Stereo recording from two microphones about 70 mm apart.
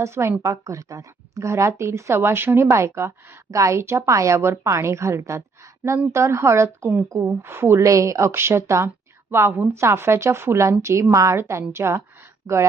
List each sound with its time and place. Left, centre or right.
0.0 s a woman's voice: right
0.5 s a woman's voice: right
8.3 s a woman's voice: right
9.3 s a woman's voice: right